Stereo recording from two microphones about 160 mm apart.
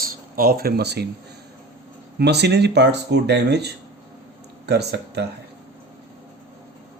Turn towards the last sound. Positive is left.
turn(degrees=-90)